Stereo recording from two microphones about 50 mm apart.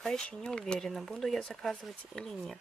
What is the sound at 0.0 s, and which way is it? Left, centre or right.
Speech, centre.